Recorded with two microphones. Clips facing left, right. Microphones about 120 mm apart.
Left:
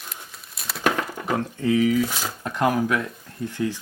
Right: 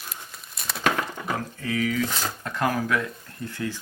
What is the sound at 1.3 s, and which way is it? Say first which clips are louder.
Speech: left 8 dB; 25° left (ahead or behind).